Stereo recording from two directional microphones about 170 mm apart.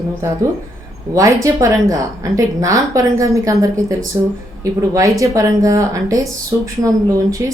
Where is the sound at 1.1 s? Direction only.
20° right (ahead or behind).